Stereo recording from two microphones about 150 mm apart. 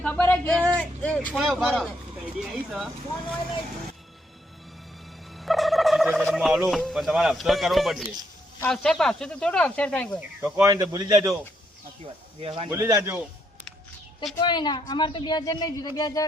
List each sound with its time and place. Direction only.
0.0 s speech: 10° left (ahead or behind)
5.4 s speech: centre (ahead or behind)
10.6 s a man's voice: 25° right (ahead or behind)
12.4 s speech: 40° right (ahead or behind)
12.7 s a man's voice: 20° right (ahead or behind)
14.4 s speech: 30° left (ahead or behind)